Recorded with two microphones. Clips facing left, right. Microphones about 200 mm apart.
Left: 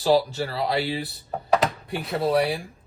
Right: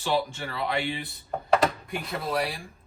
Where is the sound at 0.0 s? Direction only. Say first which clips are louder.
Left 7 dB; 35° left (ahead or behind).